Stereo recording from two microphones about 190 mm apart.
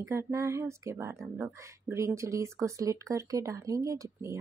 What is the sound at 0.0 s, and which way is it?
Speech, 15° right (ahead or behind).